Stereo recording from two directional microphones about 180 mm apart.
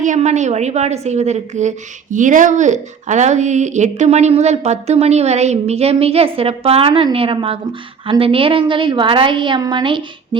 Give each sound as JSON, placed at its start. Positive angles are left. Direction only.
{"t": 0.0, "sound": "a woman's voice", "side_deg": -40}